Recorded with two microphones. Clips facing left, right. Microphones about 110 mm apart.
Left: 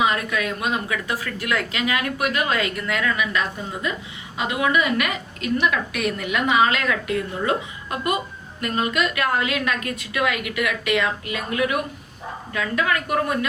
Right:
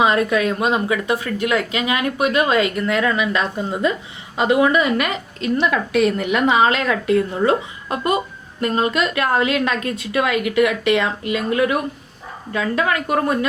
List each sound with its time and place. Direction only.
0.0 s a woman's voice: 30° right (ahead or behind)